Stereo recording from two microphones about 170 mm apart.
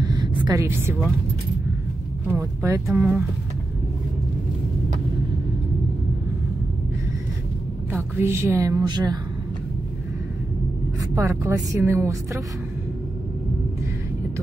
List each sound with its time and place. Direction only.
0.0 s a sound: 25° right (ahead or behind)
0.7 s speech: 15° right (ahead or behind)
2.2 s speech: 15° right (ahead or behind)
7.9 s a woman's voice: 15° right (ahead or behind)
11.0 s a woman's voice: 20° right (ahead or behind)